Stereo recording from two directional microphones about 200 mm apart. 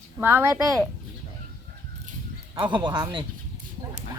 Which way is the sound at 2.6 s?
25° right (ahead or behind).